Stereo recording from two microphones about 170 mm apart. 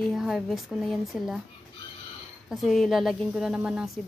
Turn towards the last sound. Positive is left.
turn(degrees=-5)  # may be behind; listen again after turning